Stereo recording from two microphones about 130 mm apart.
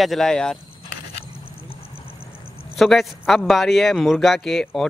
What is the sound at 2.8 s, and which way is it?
Speech, centre (ahead or behind).